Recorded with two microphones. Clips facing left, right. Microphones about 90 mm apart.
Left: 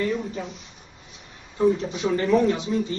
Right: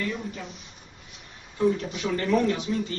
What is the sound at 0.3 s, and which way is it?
Speech, 25° left (ahead or behind).